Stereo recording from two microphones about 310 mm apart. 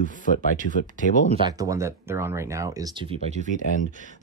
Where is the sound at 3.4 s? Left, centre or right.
Left.